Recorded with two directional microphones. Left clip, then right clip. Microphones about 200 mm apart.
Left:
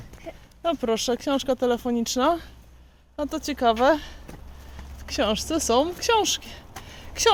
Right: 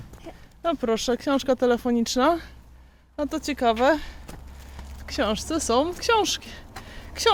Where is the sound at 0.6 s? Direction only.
5° right (ahead or behind).